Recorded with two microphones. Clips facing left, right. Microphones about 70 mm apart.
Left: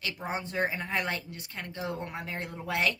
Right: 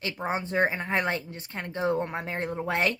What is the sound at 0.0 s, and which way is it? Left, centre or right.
Speech, right.